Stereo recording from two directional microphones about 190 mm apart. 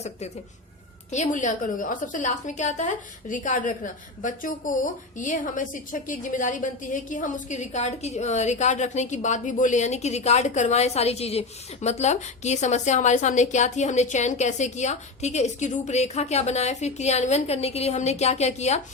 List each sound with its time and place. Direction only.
1.1 s a woman's voice: 40° left (ahead or behind)